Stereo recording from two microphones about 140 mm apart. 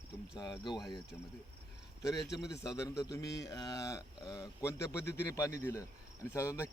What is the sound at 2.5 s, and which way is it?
A man's voice, 20° left (ahead or behind).